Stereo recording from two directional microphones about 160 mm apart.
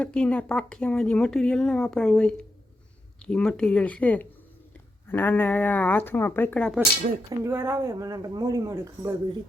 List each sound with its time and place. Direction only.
0.0 s speech: 5° left (ahead or behind)
7.3 s speech: 15° right (ahead or behind)